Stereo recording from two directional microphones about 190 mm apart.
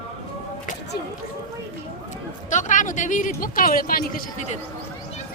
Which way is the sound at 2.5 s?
40° left (ahead or behind).